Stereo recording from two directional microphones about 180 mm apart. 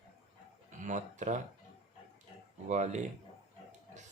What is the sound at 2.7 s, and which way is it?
Speech, 40° right (ahead or behind).